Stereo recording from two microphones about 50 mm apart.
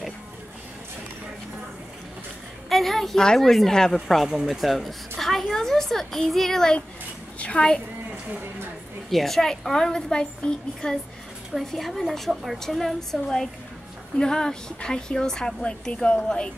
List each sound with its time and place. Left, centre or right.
2.7 s a sound: centre
3.2 s a woman's voice: centre
4.3 s a woman's voice: centre
7.3 s a woman's voice: left
9.1 s a woman's voice: centre
11.7 s a woman's voice: centre